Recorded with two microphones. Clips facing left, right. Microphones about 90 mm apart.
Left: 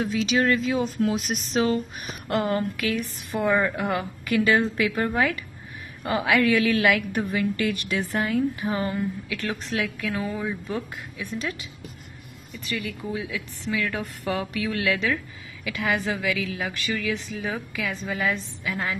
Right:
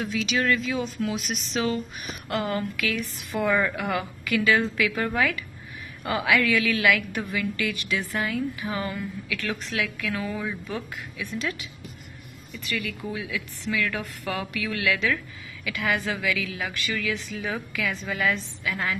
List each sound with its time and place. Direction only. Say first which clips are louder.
0.0 s a woman's voice: left 3 dB; 30° left (ahead or behind)
10.1 s speech: left 1 dB; 15° left (ahead or behind)
12.6 s a woman's voice: even; 25° left (ahead or behind)